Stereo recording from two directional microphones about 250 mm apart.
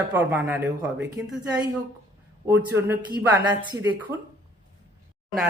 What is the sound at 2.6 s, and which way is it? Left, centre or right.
Speech, centre.